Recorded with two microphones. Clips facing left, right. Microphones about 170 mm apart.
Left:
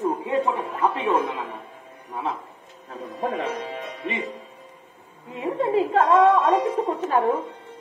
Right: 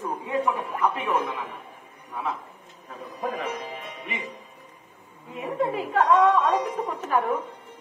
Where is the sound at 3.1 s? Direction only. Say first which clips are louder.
Left 3 dB; 35° left (ahead or behind).